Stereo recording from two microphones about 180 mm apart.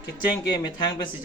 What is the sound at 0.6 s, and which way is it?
Speech, 25° left (ahead or behind).